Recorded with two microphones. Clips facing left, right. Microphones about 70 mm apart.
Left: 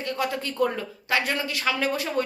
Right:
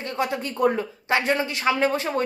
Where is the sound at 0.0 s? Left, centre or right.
Right.